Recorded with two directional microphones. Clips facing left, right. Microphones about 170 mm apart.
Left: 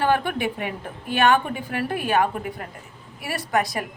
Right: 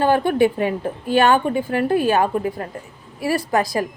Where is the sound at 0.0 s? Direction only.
30° right (ahead or behind).